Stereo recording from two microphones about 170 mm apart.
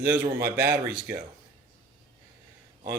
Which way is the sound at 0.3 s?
15° right (ahead or behind).